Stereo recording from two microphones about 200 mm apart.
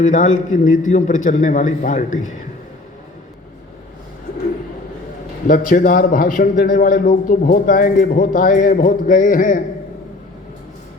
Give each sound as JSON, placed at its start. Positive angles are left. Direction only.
{"t": 0.0, "sound": "a man's voice", "side_deg": 40}
{"t": 5.5, "sound": "a man's voice", "side_deg": 45}